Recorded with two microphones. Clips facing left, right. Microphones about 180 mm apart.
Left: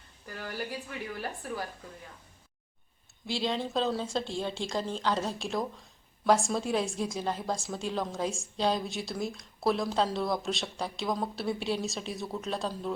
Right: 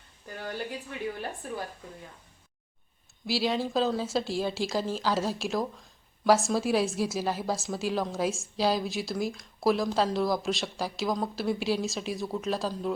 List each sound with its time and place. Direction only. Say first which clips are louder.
0.3 s speech: right 2 dB; 20° right (ahead or behind)
3.2 s speech: right 3 dB; 5° right (ahead or behind)